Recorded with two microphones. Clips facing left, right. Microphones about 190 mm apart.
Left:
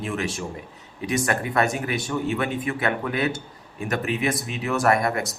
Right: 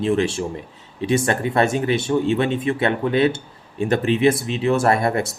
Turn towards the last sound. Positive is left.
turn(degrees=-30)  # may be behind; listen again after turning